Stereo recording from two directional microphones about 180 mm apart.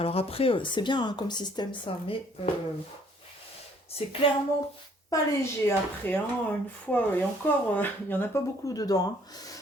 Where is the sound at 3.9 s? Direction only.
35° left (ahead or behind).